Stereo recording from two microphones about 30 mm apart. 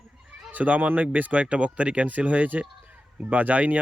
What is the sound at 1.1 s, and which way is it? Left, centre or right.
Speech, right.